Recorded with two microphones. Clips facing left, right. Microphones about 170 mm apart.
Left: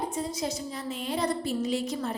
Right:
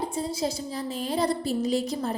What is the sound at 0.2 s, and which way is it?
A woman's voice, 30° right (ahead or behind).